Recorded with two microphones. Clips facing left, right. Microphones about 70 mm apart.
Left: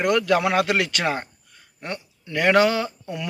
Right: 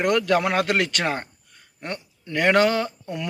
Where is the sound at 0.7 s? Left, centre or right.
Right.